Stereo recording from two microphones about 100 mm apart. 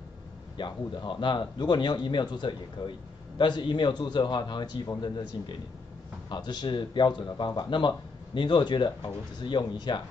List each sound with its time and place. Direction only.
0.6 s speech: 55° left (ahead or behind)